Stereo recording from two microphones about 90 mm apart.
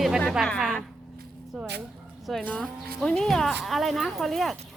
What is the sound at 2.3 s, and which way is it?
Speech, centre (ahead or behind).